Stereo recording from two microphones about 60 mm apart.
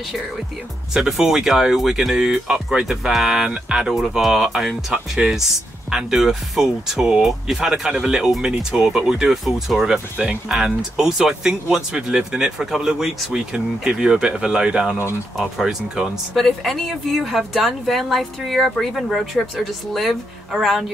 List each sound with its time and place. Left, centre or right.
0.9 s speech: centre